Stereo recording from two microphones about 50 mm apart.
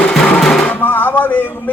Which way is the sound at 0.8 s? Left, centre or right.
Left.